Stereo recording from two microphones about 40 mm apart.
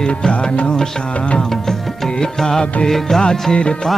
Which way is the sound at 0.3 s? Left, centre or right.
Left.